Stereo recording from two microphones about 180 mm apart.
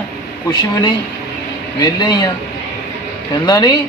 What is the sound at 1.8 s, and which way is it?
Speech, 25° left (ahead or behind).